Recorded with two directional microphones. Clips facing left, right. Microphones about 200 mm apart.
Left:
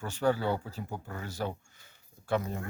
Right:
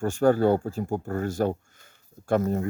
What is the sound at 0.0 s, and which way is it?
Speech, 45° right (ahead or behind).